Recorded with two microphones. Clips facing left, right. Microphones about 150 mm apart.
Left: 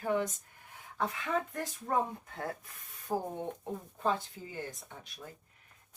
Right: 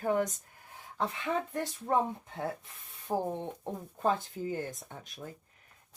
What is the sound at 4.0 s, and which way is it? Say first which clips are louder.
Speech: right 3 dB; 45° right (ahead or behind).